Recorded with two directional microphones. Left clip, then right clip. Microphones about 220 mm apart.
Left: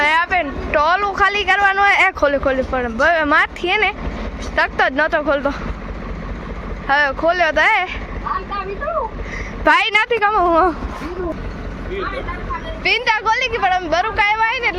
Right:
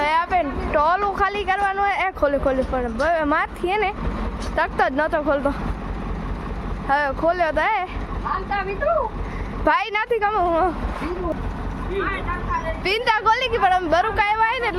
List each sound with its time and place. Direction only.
0.0 s a woman's voice: 5° right (ahead or behind)
6.8 s speech: 5° right (ahead or behind)
9.6 s speech: centre (ahead or behind)
10.2 s speech: 20° left (ahead or behind)
12.8 s a woman's voice: 15° right (ahead or behind)